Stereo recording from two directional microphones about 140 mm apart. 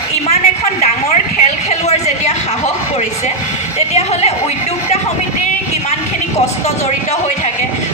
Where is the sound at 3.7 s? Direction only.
50° left (ahead or behind).